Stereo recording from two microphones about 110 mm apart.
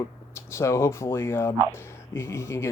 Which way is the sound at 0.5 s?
25° left (ahead or behind).